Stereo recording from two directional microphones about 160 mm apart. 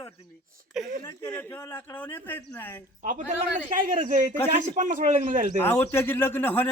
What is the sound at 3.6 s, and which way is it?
A man's voice, 55° right (ahead or behind).